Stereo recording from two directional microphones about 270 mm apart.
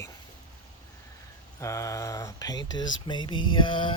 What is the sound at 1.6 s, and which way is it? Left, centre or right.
Speech, centre.